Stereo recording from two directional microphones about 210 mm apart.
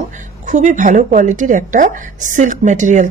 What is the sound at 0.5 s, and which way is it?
Speech, 35° right (ahead or behind).